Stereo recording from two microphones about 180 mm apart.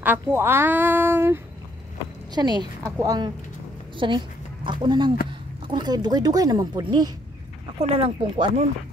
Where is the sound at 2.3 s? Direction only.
25° right (ahead or behind).